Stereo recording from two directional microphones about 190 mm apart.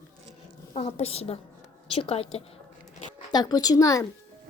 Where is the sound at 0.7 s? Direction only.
35° left (ahead or behind).